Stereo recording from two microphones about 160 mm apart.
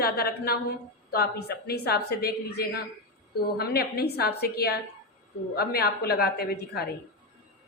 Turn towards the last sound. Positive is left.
turn(degrees=85)